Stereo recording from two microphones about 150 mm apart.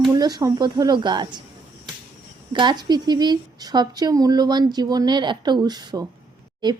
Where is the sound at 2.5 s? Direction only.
30° right (ahead or behind).